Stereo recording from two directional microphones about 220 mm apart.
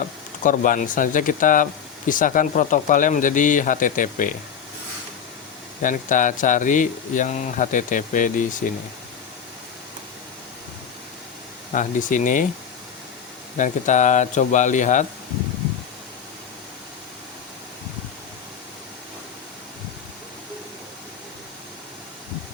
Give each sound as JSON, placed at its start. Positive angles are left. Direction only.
{"t": 0.4, "sound": "speech", "side_deg": 35}
{"t": 5.8, "sound": "speech", "side_deg": 35}
{"t": 11.7, "sound": "speech", "side_deg": 35}
{"t": 13.6, "sound": "speech", "side_deg": 35}